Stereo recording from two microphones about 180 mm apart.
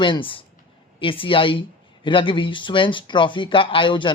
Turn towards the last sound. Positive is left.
turn(degrees=25)  # may be behind; listen again after turning